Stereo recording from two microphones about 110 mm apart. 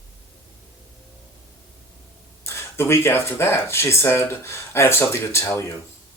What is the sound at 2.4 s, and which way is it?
Speech, 25° left (ahead or behind).